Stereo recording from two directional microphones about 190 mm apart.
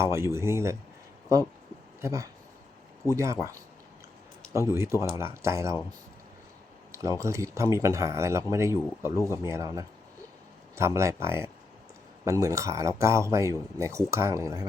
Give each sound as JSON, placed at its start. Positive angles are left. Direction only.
{"t": 0.0, "sound": "speech", "side_deg": -15}
{"t": 2.0, "sound": "speech", "side_deg": -15}
{"t": 4.5, "sound": "speech", "side_deg": -15}
{"t": 6.9, "sound": "speech", "side_deg": -15}